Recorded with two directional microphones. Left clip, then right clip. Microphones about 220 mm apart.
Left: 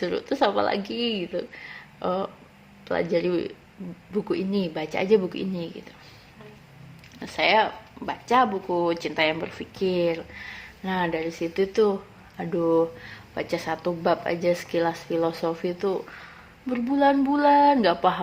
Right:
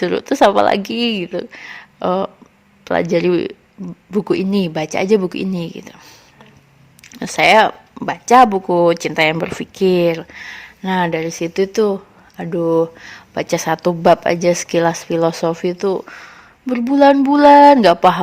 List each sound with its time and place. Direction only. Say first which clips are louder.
0.0 s speech: right 11 dB; 50° right (ahead or behind)
7.1 s speech: right 10 dB; 50° right (ahead or behind)